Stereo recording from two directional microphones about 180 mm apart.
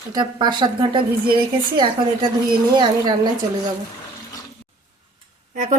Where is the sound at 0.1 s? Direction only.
25° right (ahead or behind).